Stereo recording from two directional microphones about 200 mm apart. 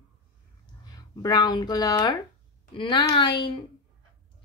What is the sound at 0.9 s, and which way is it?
Speech, 20° left (ahead or behind).